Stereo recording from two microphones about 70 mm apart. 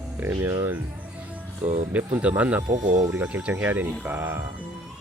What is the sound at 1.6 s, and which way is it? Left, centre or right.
Speech, right.